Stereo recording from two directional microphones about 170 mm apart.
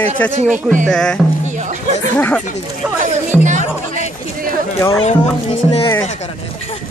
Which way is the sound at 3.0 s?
45° right (ahead or behind).